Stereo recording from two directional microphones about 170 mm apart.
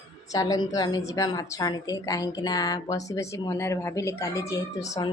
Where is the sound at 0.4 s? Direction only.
25° left (ahead or behind).